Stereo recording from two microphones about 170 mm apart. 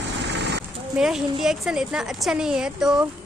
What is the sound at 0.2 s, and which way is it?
Vehicle, 90° right.